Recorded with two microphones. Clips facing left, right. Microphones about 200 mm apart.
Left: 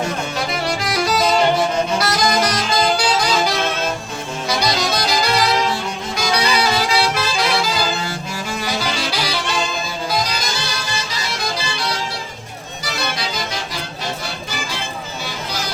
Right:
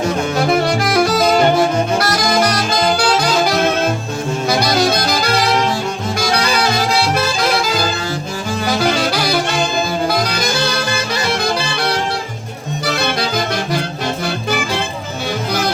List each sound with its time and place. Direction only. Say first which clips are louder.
0.3 s saxophone: right 7 dB; 50° right (ahead or behind)
4.4 s saxophone: right 5 dB; 55° right (ahead or behind)
8.6 s saxophone: right 9 dB; 50° right (ahead or behind)
10.1 s music: right 5 dB; 60° right (ahead or behind)